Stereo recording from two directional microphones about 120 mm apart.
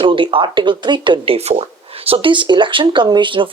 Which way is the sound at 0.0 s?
45° right (ahead or behind).